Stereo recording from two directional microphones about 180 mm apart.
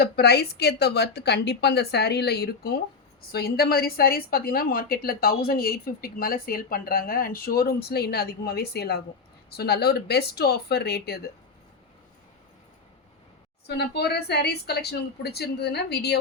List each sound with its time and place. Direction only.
0.0 s a woman's voice: 60° left (ahead or behind)
13.7 s a woman's voice: 65° left (ahead or behind)